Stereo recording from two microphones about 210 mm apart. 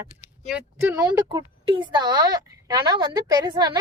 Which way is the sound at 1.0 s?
20° right (ahead or behind).